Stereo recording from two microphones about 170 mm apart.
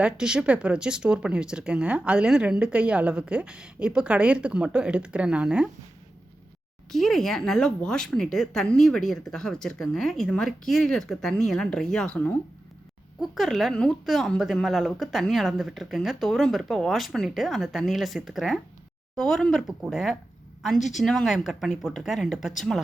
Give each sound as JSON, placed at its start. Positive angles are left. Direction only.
{"t": 0.0, "sound": "speech", "side_deg": -5}
{"t": 6.9, "sound": "speech", "side_deg": 0}
{"t": 20.7, "sound": "speech", "side_deg": 45}
{"t": 21.0, "sound": "speech", "side_deg": 0}